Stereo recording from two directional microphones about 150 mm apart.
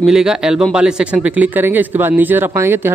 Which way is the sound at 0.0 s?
5° right (ahead or behind).